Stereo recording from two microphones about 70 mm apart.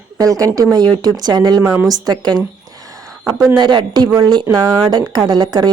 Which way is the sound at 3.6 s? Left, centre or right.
Right.